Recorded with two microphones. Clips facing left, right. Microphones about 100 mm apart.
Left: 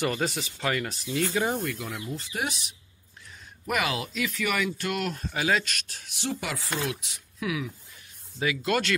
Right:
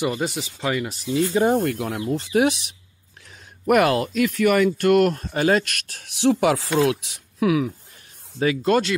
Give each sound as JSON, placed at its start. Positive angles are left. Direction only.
{"t": 0.2, "sound": "speech", "side_deg": -5}
{"t": 0.6, "sound": "speech", "side_deg": -15}
{"t": 1.4, "sound": "speech", "side_deg": -55}
{"t": 2.3, "sound": "speech", "side_deg": -75}
{"t": 3.6, "sound": "speech", "side_deg": -55}
{"t": 8.4, "sound": "speech", "side_deg": -35}